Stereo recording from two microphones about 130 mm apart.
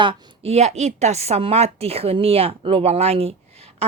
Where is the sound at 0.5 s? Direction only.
55° right (ahead or behind).